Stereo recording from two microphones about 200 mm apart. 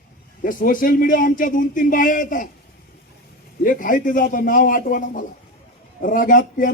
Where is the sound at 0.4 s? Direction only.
40° left (ahead or behind).